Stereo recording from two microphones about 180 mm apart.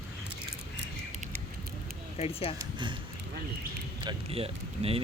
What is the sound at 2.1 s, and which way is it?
Speech, 35° left (ahead or behind).